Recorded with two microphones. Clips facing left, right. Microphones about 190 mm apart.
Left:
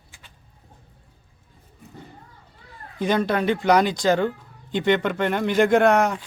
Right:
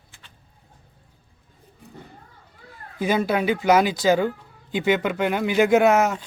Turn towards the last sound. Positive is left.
turn(degrees=-5)  # may be behind; listen again after turning